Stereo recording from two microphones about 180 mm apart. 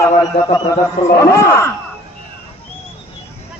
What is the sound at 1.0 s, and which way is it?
Speech, 15° left (ahead or behind).